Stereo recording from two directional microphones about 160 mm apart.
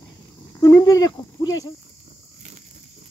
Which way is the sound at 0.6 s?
20° left (ahead or behind).